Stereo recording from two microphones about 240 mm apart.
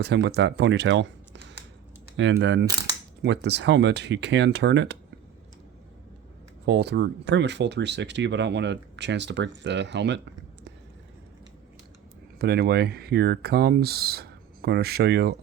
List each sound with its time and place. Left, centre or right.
0.0 s speech: right
6.7 s speech: right
12.4 s speech: right